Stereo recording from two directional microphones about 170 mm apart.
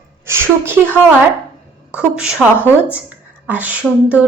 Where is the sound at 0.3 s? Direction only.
15° right (ahead or behind).